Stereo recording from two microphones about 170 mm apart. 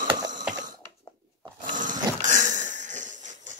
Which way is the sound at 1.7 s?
50° right (ahead or behind).